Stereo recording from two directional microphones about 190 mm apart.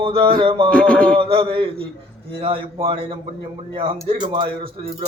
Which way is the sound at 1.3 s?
25° right (ahead or behind).